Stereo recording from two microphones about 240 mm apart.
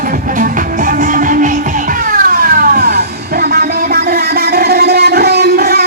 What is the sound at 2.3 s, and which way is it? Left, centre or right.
Vehicle, right.